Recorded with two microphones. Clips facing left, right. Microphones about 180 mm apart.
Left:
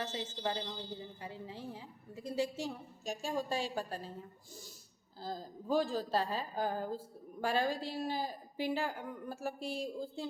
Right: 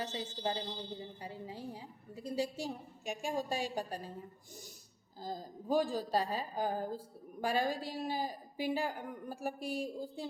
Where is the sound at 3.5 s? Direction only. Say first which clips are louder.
Even; 15° right (ahead or behind).